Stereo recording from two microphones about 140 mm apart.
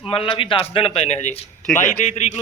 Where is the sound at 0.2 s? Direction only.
40° left (ahead or behind).